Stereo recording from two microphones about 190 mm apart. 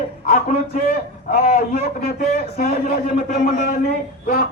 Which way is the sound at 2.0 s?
50° left (ahead or behind).